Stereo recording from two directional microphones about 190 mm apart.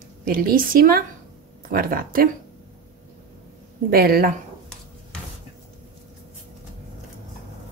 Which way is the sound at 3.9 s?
55° right (ahead or behind).